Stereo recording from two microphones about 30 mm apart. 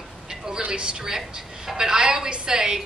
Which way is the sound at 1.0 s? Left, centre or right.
Centre.